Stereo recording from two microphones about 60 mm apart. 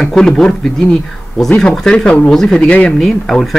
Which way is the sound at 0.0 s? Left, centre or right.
Centre.